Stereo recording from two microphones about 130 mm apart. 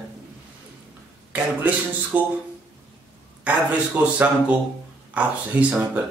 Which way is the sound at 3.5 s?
10° right (ahead or behind).